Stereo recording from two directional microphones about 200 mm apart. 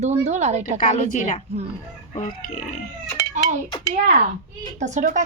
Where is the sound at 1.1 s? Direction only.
40° left (ahead or behind).